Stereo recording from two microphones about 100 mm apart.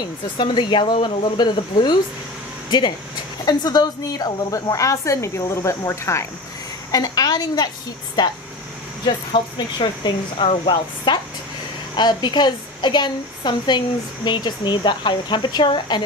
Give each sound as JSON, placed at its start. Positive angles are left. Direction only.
{"t": 0.4, "sound": "a woman's voice", "side_deg": 50}
{"t": 3.4, "sound": "a woman's voice", "side_deg": 45}
{"t": 6.9, "sound": "a woman's voice", "side_deg": 40}
{"t": 9.0, "sound": "a woman's voice", "side_deg": 50}